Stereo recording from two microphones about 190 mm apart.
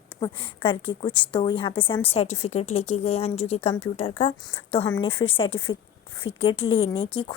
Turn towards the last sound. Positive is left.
turn(degrees=30)  # may be behind; listen again after turning